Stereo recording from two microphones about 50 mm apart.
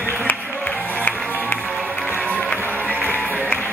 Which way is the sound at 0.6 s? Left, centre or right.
Left.